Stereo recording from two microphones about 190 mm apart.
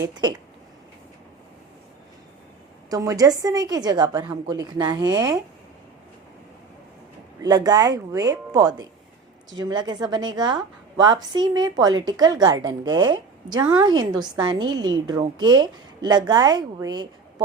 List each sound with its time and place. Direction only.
0.0 s a woman's voice: 20° right (ahead or behind)
2.9 s a woman's voice: 20° right (ahead or behind)
7.4 s a woman's voice: 20° right (ahead or behind)